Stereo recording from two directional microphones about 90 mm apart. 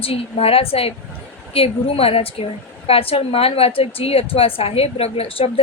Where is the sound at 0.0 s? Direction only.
90° left.